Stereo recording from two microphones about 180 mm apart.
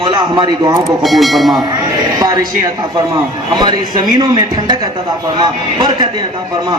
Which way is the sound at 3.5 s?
25° right (ahead or behind).